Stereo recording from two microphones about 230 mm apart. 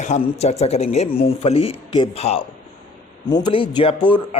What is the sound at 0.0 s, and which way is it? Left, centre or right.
Speech, left.